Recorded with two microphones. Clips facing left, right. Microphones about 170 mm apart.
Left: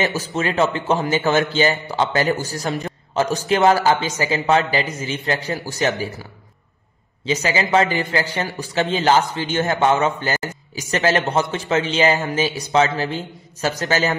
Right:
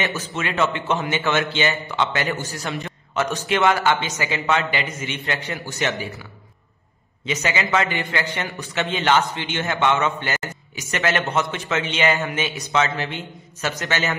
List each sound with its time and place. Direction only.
0.0 s a man's voice: 35° left (ahead or behind)
7.2 s a man's voice: 35° left (ahead or behind)